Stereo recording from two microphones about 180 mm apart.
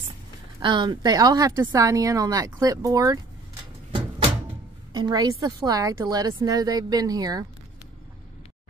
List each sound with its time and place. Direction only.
0.6 s speech: 25° right (ahead or behind)
4.9 s speech: 25° right (ahead or behind)